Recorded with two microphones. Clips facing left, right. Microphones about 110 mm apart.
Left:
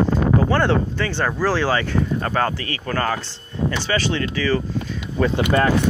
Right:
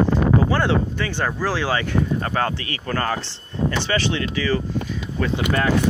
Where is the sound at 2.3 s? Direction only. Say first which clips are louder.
Left 2 dB; 40° left (ahead or behind).